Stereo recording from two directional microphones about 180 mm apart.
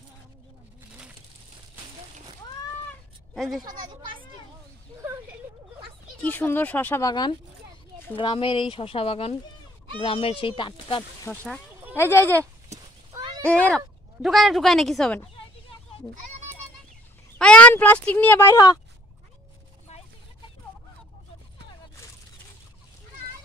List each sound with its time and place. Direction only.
3.3 s speech: centre (ahead or behind)
3.6 s speech: 25° right (ahead or behind)
6.2 s speech: 10° left (ahead or behind); by 11.1 s 25° left (ahead or behind)
11.3 s speech: 10° left (ahead or behind)
13.4 s speech: 5° left (ahead or behind)
17.4 s speech: 5° left (ahead or behind)
19.9 s a sound: 40° left (ahead or behind)